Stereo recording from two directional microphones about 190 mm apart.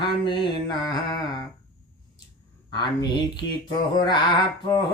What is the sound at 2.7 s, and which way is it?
Speech, 25° left (ahead or behind).